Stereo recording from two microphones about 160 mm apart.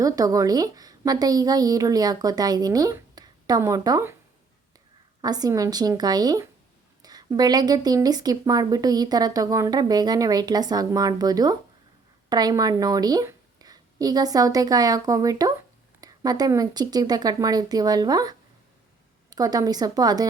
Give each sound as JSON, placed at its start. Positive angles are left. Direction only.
{"t": 0.0, "sound": "speech", "side_deg": -20}
{"t": 5.2, "sound": "a woman's voice", "side_deg": -25}